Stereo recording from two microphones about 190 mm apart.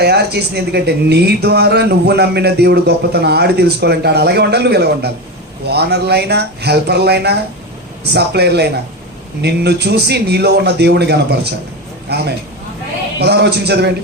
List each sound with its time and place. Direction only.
0.0 s a man's voice: 60° right (ahead or behind)